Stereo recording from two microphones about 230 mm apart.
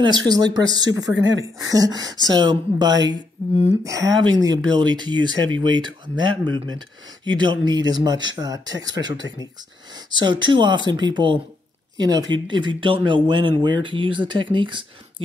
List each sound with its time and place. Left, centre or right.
0.0 s speech: centre